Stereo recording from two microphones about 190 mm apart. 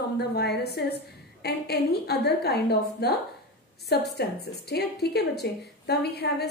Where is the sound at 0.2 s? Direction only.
60° left (ahead or behind).